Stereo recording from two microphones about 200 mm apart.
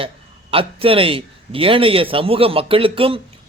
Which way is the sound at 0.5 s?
25° right (ahead or behind).